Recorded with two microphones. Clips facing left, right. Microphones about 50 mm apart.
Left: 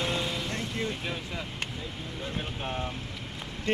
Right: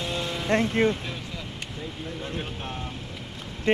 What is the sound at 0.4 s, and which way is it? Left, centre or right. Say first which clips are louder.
Speech: right 10 dB; right.